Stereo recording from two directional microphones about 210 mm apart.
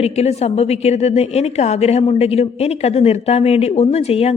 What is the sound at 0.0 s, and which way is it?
A woman's voice, 30° left (ahead or behind).